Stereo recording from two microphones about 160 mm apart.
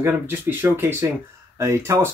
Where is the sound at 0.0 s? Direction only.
15° right (ahead or behind).